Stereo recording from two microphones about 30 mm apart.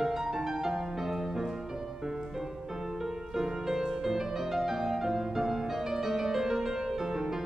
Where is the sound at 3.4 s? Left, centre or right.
Right.